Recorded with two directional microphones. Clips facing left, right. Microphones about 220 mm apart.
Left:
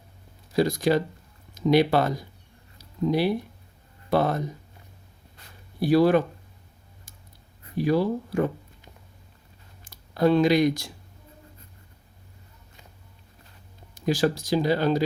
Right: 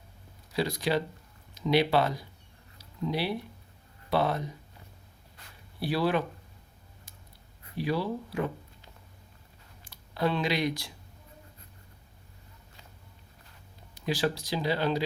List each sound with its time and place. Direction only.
0.5 s speech: 45° left (ahead or behind)
2.7 s a sound: 45° left (ahead or behind)
4.1 s speech: 45° left (ahead or behind)
5.8 s speech: 45° left (ahead or behind)
7.8 s speech: 45° left (ahead or behind)
9.8 s speech: 45° left (ahead or behind)
13.9 s speech: 45° left (ahead or behind)